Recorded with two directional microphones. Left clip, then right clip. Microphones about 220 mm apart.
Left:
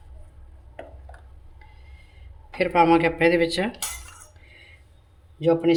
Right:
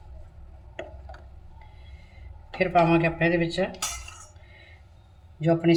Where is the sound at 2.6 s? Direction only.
50° left (ahead or behind).